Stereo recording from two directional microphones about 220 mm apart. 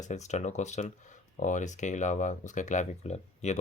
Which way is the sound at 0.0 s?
30° left (ahead or behind).